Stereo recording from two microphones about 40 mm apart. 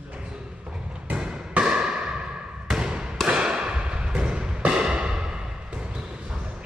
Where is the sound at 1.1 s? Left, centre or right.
Right.